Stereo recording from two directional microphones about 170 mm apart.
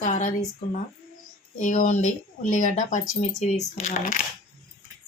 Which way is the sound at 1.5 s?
45° left (ahead or behind).